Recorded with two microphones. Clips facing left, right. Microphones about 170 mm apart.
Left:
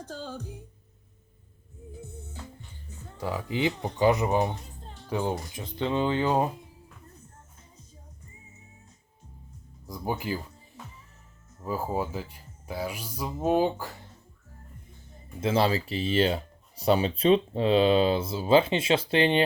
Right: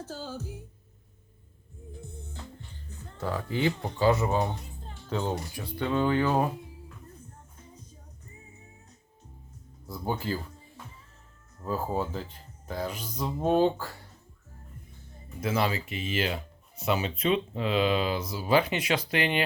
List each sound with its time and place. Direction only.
0.0 s music: 5° right (ahead or behind)
1.9 s music: 5° left (ahead or behind)
3.2 s speech: 15° left (ahead or behind)
9.8 s speech: 10° left (ahead or behind)
11.6 s speech: 10° left (ahead or behind)
15.4 s speech: 30° left (ahead or behind)